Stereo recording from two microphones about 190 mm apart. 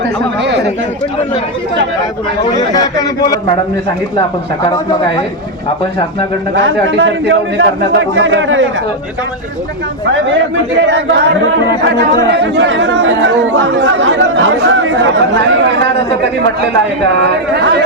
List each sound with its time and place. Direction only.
6.6 s speech: 80° right
10.8 s speech: 70° right (ahead or behind)
12.3 s speech: 65° right (ahead or behind)
17.5 s speech: 65° right (ahead or behind)